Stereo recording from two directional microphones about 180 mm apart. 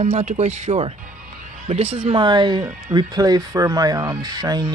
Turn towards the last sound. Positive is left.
turn(degrees=-20)  # may be behind; listen again after turning